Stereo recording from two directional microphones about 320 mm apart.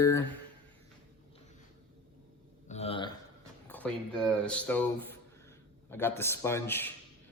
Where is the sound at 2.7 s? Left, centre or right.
Centre.